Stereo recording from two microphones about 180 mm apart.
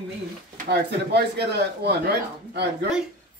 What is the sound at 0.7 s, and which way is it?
Speech, 65° right (ahead or behind).